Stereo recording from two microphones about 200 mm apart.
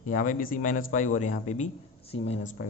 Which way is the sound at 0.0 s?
40° left (ahead or behind).